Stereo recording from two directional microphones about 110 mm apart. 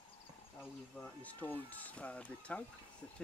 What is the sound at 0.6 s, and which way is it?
Speech, 15° left (ahead or behind).